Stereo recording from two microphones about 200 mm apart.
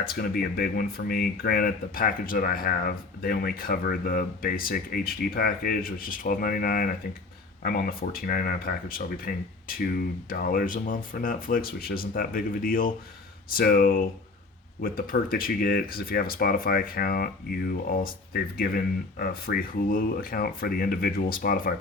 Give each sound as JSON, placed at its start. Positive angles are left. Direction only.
{"t": 0.0, "sound": "speech", "side_deg": 50}